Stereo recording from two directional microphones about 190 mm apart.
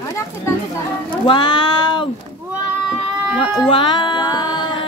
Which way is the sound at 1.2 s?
25° left (ahead or behind).